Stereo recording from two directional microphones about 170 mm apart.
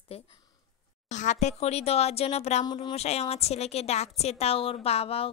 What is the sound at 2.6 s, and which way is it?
A woman's voice, 25° left (ahead or behind).